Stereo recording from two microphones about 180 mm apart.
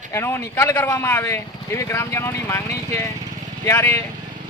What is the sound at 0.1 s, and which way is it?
A woman's voice, 15° left (ahead or behind).